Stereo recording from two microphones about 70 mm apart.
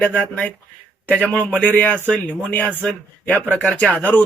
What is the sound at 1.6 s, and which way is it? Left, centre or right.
Speech, left.